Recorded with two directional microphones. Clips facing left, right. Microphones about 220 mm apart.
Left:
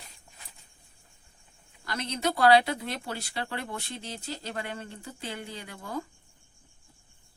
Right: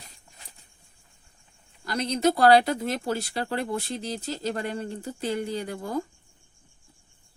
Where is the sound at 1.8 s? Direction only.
35° right (ahead or behind).